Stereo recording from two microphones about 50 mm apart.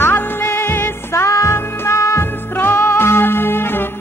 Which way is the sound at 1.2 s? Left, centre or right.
Left.